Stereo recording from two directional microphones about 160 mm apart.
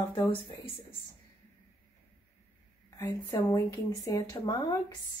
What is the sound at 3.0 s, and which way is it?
A woman's voice, 20° left (ahead or behind).